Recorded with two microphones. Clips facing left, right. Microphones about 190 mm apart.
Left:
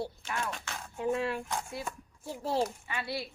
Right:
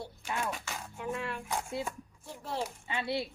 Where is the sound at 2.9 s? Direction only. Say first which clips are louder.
Right 3 dB; 25° right (ahead or behind).